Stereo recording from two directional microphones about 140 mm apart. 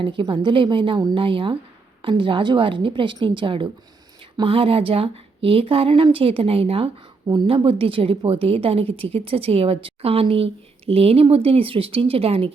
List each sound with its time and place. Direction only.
0.0 s a woman's voice: 35° right (ahead or behind)